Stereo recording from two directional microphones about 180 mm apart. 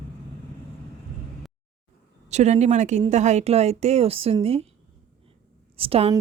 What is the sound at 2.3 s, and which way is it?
Speech, 40° right (ahead or behind).